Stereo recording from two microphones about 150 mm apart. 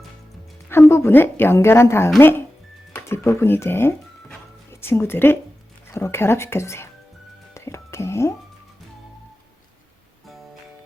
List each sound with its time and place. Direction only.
0.7 s a woman's voice: 15° left (ahead or behind)
7.5 s music: 20° left (ahead or behind)